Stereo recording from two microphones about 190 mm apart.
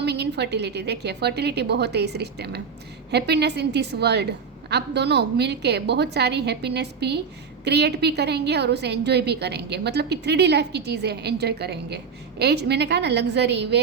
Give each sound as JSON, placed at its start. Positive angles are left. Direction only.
{"t": 0.0, "sound": "a woman's voice", "side_deg": -60}